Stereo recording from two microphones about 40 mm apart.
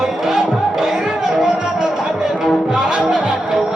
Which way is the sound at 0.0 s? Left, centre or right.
Centre.